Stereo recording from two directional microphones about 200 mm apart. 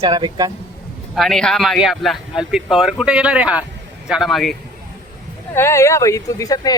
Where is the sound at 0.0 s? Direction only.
20° right (ahead or behind).